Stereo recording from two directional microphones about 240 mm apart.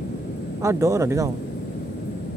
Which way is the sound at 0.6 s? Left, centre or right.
Centre.